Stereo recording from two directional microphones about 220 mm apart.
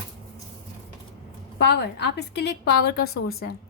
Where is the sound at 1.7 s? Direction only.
50° left (ahead or behind).